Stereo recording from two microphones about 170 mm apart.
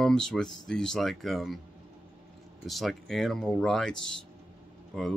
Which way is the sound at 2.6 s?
Centre (ahead or behind).